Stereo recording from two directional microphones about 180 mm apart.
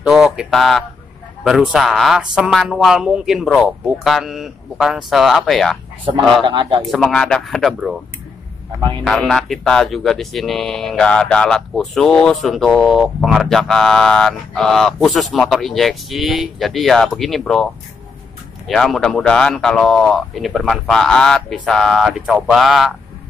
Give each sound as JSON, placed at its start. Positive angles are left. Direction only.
{"t": 0.0, "sound": "speech", "side_deg": -5}
{"t": 6.4, "sound": "speech", "side_deg": -25}
{"t": 6.9, "sound": "speech", "side_deg": 5}
{"t": 9.0, "sound": "speech", "side_deg": 0}
{"t": 18.7, "sound": "speech", "side_deg": 0}